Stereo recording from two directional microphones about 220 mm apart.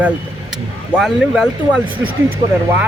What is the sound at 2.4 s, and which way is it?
Speech, 20° right (ahead or behind).